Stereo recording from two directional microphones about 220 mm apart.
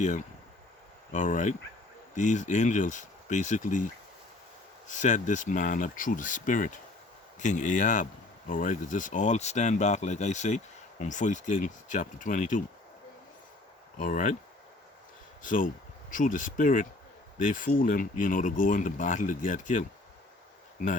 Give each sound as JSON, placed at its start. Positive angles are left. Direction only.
{"t": 1.1, "sound": "speech", "side_deg": 35}
{"t": 4.9, "sound": "speech", "side_deg": 35}
{"t": 14.0, "sound": "speech", "side_deg": 35}
{"t": 15.4, "sound": "speech", "side_deg": 35}